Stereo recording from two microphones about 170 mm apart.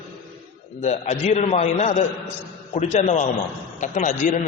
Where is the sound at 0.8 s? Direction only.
45° left (ahead or behind).